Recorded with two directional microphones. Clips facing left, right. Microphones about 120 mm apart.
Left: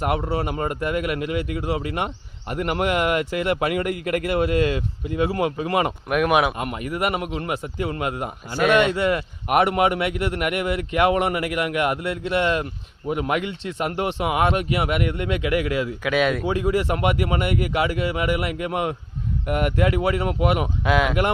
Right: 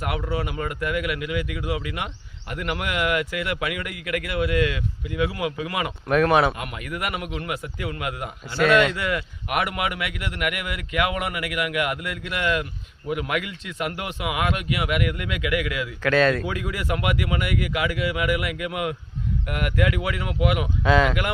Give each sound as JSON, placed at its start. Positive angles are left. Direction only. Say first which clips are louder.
{"t": 0.0, "sound": "speech", "louder": "left 4 dB", "side_deg": 35}
{"t": 6.1, "sound": "speech", "louder": "right 3 dB", "side_deg": 10}
{"t": 6.6, "sound": "speech", "louder": "left 6 dB", "side_deg": 35}
{"t": 8.5, "sound": "speech", "louder": "even", "side_deg": 5}
{"t": 9.0, "sound": "speech", "louder": "left 5 dB", "side_deg": 35}
{"t": 16.0, "sound": "speech", "louder": "right 3 dB", "side_deg": 10}
{"t": 16.5, "sound": "speech", "louder": "left 6 dB", "side_deg": 30}
{"t": 20.8, "sound": "speech", "louder": "right 2 dB", "side_deg": 10}